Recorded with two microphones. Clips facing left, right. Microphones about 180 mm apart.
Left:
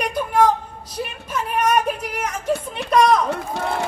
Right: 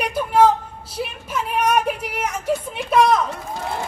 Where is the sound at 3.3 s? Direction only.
70° left (ahead or behind).